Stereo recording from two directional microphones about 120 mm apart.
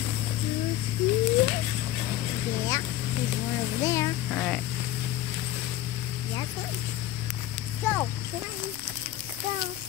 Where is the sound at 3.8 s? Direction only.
25° left (ahead or behind).